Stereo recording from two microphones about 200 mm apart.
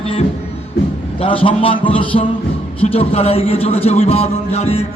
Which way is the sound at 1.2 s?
25° left (ahead or behind).